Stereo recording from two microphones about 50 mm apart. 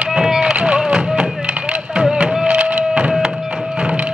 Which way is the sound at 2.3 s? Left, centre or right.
Centre.